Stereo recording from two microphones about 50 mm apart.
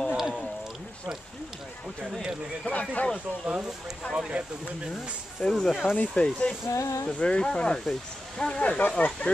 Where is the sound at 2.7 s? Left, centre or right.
Left.